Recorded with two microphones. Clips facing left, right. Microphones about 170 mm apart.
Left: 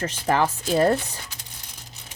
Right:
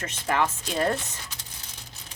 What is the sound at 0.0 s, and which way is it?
Speech, 35° left (ahead or behind).